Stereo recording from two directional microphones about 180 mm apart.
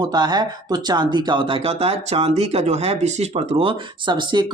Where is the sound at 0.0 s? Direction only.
25° right (ahead or behind).